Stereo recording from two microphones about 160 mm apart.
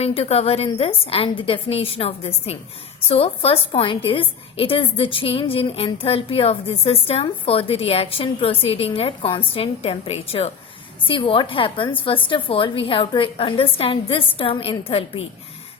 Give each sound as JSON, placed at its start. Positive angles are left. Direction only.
{"t": 0.0, "sound": "a woman's voice", "side_deg": 40}